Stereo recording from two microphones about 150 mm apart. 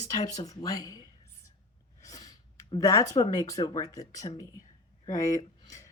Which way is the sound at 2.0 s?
25° left (ahead or behind).